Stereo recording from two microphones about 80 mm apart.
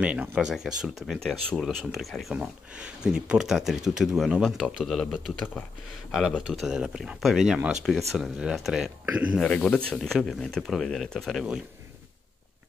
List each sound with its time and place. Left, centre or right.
0.0 s speech: centre
2.3 s speech: centre
6.1 s speech: centre
9.1 s speech: centre
9.4 s speech: centre